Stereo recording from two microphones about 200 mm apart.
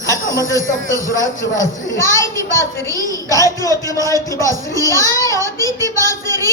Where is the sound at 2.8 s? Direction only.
15° right (ahead or behind).